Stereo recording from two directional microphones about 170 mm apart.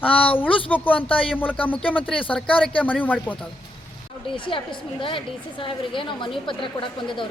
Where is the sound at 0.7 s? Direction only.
10° left (ahead or behind).